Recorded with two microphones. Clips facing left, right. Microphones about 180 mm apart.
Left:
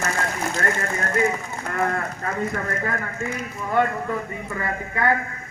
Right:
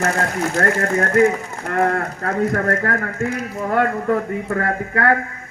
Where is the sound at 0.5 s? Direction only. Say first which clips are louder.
Right 10 dB; 55° right (ahead or behind).